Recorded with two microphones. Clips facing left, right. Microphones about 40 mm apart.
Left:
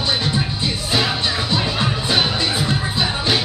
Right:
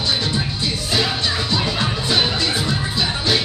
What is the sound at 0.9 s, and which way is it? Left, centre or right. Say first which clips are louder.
Music: left 1 dB; left.